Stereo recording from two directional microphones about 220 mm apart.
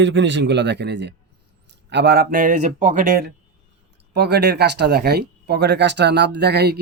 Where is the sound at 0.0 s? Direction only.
55° right (ahead or behind).